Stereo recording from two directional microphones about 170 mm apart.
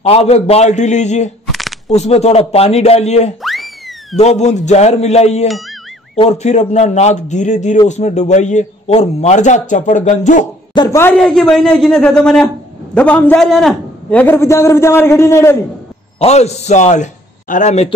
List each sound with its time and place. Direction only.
0.0 s speech: 35° left (ahead or behind)
3.4 s a sound: centre (ahead or behind)
4.2 s a man's voice: 40° left (ahead or behind)
10.7 s chopping: 25° left (ahead or behind)
11.0 s a man's voice: 10° left (ahead or behind)
16.2 s a man's voice: 40° left (ahead or behind)